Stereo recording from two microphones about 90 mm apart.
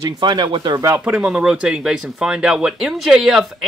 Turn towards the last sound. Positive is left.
turn(degrees=-5)  # may be behind; listen again after turning